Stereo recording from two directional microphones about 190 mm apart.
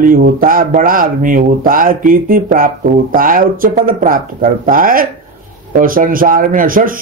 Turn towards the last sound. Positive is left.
turn(degrees=-45)  # may be behind; listen again after turning